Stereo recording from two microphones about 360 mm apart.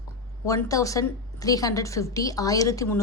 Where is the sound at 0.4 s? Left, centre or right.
Centre.